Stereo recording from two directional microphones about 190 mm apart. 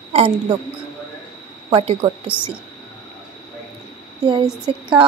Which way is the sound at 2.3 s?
5° right (ahead or behind).